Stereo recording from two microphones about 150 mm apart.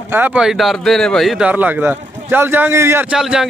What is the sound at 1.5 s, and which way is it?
A man's voice, 10° right (ahead or behind).